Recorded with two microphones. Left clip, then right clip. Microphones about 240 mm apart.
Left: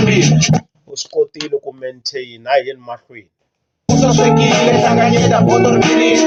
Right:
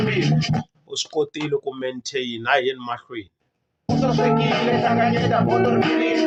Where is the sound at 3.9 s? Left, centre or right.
Left.